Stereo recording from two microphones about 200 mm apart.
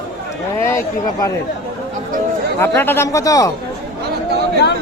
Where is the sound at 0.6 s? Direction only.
15° left (ahead or behind).